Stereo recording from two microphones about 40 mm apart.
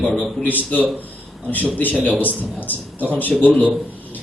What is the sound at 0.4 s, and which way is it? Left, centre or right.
Speech, left.